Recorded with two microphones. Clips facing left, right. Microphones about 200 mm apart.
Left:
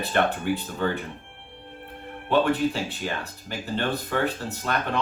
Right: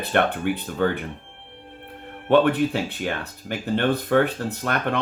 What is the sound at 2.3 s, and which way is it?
Speech, 55° right (ahead or behind).